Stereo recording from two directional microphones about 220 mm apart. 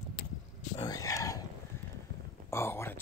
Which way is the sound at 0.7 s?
15° left (ahead or behind).